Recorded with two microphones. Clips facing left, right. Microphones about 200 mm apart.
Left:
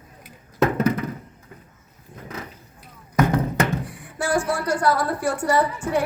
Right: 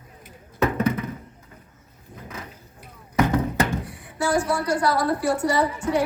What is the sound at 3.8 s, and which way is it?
A woman's voice, 50° left (ahead or behind).